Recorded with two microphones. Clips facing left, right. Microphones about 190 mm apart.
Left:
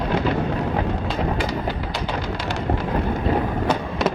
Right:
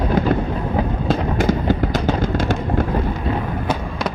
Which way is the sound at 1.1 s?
45° right (ahead or behind).